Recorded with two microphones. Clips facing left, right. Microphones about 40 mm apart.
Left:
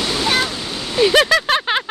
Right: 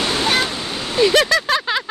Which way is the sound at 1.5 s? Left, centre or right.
Left.